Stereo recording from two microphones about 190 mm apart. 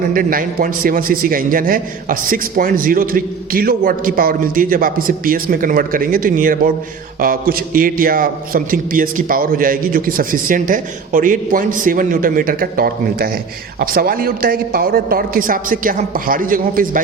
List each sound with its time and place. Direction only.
0.1 s a man's voice: 50° right (ahead or behind)